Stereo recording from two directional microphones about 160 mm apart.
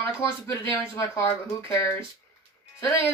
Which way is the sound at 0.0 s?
20° left (ahead or behind).